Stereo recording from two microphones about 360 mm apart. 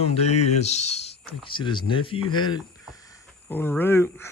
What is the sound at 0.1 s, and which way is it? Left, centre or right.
Speech, centre.